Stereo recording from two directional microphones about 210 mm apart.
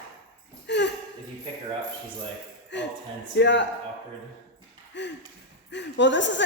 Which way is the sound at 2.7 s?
60° left (ahead or behind).